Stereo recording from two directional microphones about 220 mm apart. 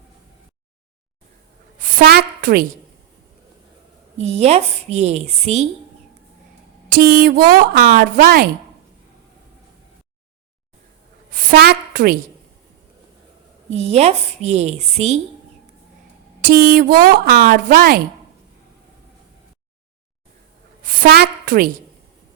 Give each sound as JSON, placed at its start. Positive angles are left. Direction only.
{"t": 1.8, "sound": "a woman's voice", "side_deg": -40}
{"t": 4.2, "sound": "a woman's voice", "side_deg": -30}
{"t": 6.9, "sound": "a woman's voice", "side_deg": -40}
{"t": 11.3, "sound": "a sound", "side_deg": -45}
{"t": 13.7, "sound": "a woman's voice", "side_deg": -30}
{"t": 16.4, "sound": "a woman's voice", "side_deg": -40}
{"t": 20.8, "sound": "a woman's voice", "side_deg": -40}